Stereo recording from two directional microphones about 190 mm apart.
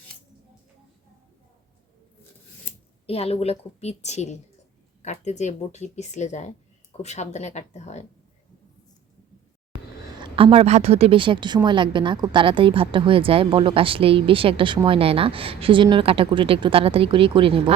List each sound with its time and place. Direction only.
3.1 s speech: 30° left (ahead or behind)
10.2 s a woman's voice: 30° right (ahead or behind)